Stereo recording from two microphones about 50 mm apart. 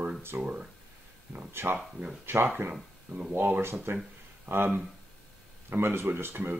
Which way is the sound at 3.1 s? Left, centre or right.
Right.